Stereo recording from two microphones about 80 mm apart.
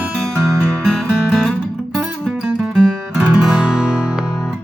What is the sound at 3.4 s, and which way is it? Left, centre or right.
Music, centre.